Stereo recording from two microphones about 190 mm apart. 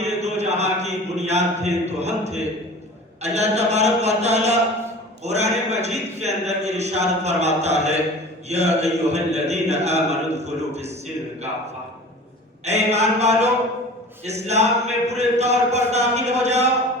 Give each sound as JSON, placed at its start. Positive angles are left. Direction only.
{"t": 0.2, "sound": "a sound", "side_deg": -35}
{"t": 3.2, "sound": "a man's voice", "side_deg": -35}
{"t": 12.6, "sound": "a man's voice", "side_deg": -35}